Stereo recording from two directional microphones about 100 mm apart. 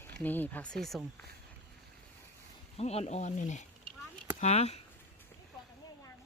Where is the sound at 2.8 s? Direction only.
90° left.